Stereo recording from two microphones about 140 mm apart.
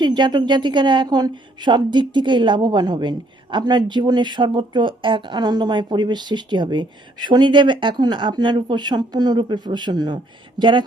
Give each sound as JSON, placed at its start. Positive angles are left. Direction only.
{"t": 0.0, "sound": "a woman's voice", "side_deg": -30}